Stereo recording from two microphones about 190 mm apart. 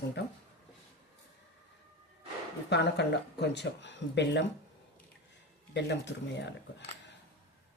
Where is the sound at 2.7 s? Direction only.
65° left (ahead or behind).